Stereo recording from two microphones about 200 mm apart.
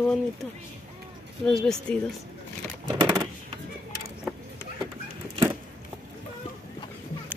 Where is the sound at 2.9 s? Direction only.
20° right (ahead or behind).